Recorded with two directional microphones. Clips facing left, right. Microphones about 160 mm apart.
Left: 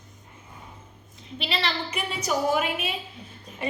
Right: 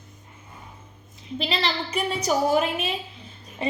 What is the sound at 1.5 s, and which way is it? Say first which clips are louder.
A woman's voice: right 1 dB; 35° right (ahead or behind).